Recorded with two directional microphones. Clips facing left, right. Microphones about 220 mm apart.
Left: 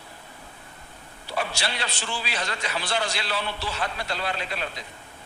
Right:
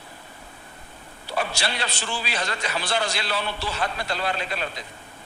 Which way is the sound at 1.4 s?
45° right (ahead or behind).